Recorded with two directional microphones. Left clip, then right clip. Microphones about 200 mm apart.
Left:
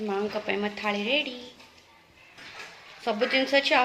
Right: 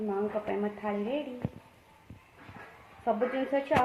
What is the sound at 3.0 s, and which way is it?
Speech, 25° left (ahead or behind).